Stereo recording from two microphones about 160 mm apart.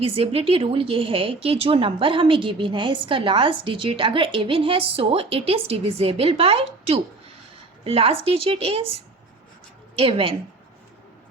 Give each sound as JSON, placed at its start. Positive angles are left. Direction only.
{"t": 0.0, "sound": "a woman's voice", "side_deg": -35}
{"t": 9.9, "sound": "a woman's voice", "side_deg": -35}